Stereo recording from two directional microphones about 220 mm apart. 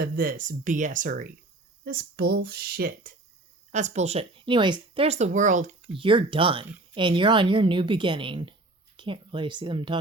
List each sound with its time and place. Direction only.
0.0 s speech: 40° right (ahead or behind)
6.0 s speech: 25° right (ahead or behind)